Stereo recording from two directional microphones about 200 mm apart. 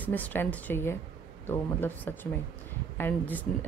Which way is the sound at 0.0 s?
10° left (ahead or behind).